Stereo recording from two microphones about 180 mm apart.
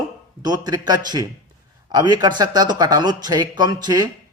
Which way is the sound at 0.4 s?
20° right (ahead or behind).